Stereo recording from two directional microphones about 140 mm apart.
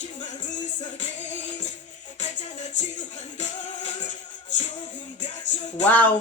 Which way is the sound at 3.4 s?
55° left (ahead or behind).